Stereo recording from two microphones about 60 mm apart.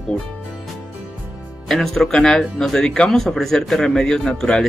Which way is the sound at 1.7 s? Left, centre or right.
Centre.